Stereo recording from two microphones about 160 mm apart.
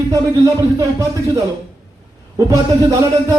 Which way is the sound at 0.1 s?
20° right (ahead or behind).